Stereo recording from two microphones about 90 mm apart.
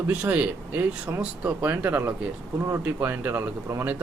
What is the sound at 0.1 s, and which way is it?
Speech, 20° right (ahead or behind).